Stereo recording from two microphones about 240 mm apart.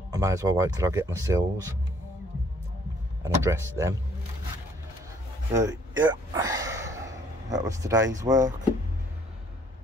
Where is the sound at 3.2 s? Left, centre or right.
Centre.